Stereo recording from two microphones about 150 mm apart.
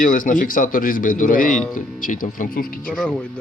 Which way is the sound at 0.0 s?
65° left (ahead or behind).